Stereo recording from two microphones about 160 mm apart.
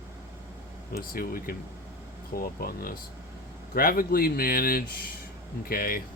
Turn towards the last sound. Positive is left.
turn(degrees=65)  # may be behind; listen again after turning